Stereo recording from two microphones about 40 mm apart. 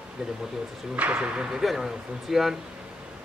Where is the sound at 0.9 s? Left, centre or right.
Right.